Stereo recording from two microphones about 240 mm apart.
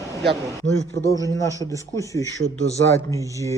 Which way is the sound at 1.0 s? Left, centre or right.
Centre.